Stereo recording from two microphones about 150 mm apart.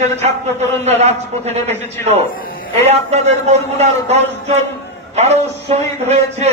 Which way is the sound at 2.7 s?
45° right (ahead or behind).